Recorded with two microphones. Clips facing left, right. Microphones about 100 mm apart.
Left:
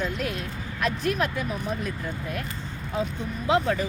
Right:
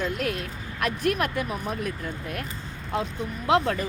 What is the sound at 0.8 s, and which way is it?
Speech, 60° right (ahead or behind).